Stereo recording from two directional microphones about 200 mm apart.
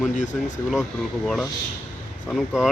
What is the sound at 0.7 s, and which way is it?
Speech, centre (ahead or behind).